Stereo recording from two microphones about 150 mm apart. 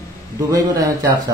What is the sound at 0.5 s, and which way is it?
Speech, 25° right (ahead or behind).